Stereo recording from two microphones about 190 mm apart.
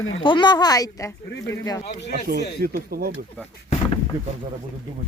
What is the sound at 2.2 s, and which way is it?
Speech, 55° right (ahead or behind).